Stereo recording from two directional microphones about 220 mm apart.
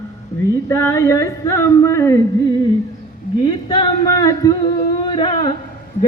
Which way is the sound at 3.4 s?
20° left (ahead or behind).